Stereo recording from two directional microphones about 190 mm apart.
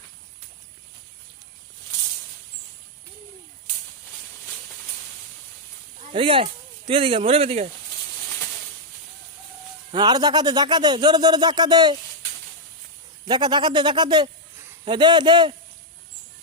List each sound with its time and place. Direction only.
6.0 s a sound: 30° right (ahead or behind)
6.4 s speech: 30° right (ahead or behind)
9.9 s speech: 20° right (ahead or behind)
13.2 s speech: 20° right (ahead or behind)